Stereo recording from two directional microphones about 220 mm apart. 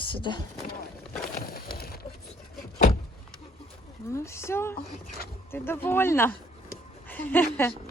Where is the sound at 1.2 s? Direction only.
40° left (ahead or behind).